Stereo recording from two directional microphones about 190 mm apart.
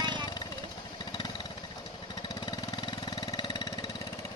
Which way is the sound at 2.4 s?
25° left (ahead or behind).